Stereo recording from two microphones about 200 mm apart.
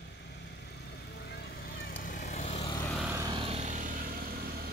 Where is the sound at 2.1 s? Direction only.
40° left (ahead or behind).